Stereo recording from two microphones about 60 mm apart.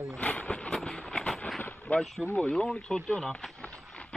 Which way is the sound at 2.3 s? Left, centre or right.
Centre.